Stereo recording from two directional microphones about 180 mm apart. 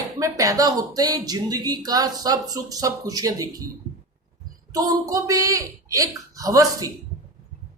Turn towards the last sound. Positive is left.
turn(degrees=-20)  # may be behind; listen again after turning